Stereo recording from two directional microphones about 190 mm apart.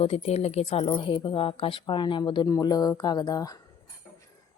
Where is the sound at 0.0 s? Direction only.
35° left (ahead or behind).